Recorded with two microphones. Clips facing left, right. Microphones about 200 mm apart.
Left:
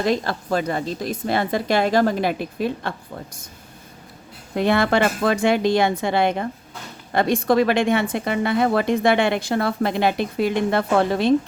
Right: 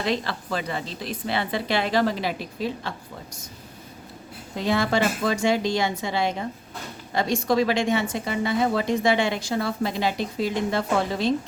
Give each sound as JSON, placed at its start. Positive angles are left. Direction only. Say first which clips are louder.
{"t": 0.0, "sound": "a woman's voice", "louder": "left 5 dB", "side_deg": 45}
{"t": 4.5, "sound": "a woman's voice", "louder": "left 4 dB", "side_deg": 60}